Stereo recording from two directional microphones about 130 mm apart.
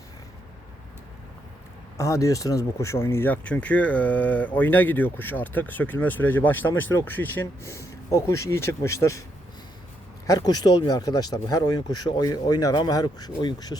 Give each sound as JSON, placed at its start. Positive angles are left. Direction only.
{"t": 2.0, "sound": "speech", "side_deg": 25}
{"t": 10.2, "sound": "speech", "side_deg": 30}